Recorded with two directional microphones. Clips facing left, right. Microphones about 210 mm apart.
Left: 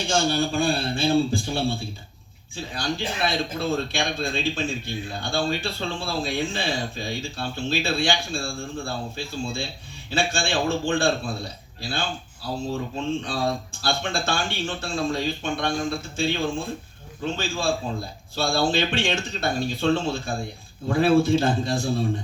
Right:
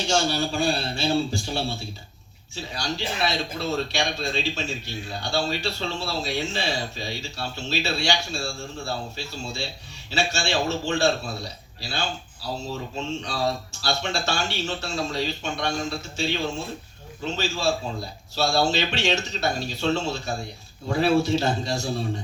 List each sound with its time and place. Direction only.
0.1 s speech: 50° left (ahead or behind)